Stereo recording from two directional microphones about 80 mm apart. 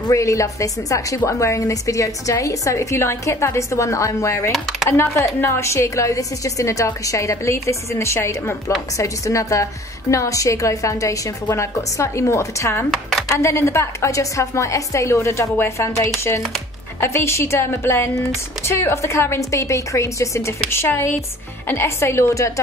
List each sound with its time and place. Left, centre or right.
0.1 s a woman's voice: left